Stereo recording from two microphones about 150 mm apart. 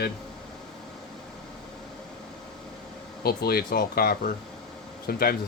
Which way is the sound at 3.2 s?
90° left.